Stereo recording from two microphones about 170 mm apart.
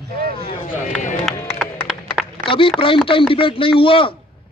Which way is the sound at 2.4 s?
30° left (ahead or behind).